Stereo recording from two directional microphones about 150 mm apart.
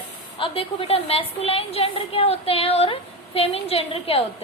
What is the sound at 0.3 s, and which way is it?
A woman's voice, 35° left (ahead or behind).